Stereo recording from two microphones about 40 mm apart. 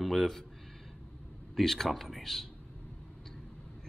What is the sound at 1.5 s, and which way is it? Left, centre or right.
Speech, centre.